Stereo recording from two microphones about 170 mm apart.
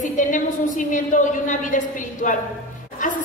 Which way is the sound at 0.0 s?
50° left (ahead or behind).